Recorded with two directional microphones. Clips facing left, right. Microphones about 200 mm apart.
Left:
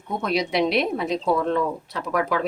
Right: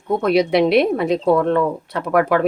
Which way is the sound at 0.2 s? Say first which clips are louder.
Right 6 dB; 60° right (ahead or behind).